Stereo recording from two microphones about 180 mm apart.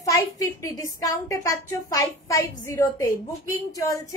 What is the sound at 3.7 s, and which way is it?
Speech, 20° left (ahead or behind).